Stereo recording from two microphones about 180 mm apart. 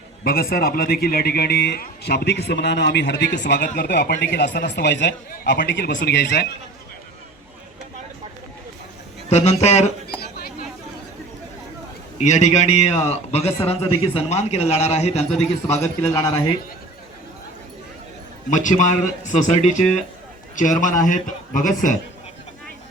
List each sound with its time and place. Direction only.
0.3 s a man's voice: 55° left (ahead or behind)
9.3 s a man's voice: 35° left (ahead or behind)
10.2 s a sound: 60° left (ahead or behind)
12.1 s a man's voice: 40° left (ahead or behind)
15.8 s a man's voice: 15° left (ahead or behind)
18.5 s a man's voice: 45° left (ahead or behind)